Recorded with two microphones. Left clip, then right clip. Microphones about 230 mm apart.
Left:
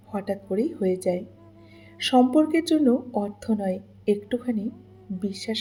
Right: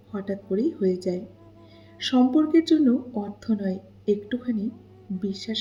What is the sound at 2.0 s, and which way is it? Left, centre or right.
Speech, left.